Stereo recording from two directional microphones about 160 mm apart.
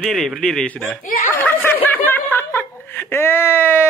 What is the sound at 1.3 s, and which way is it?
Speech, 10° left (ahead or behind).